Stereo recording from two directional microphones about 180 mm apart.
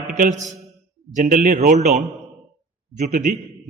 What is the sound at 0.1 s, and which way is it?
A man's voice, 45° right (ahead or behind).